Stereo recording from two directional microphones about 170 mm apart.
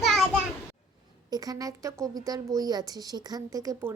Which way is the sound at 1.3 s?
20° right (ahead or behind).